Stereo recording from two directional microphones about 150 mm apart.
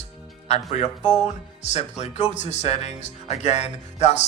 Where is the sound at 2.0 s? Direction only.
50° left (ahead or behind).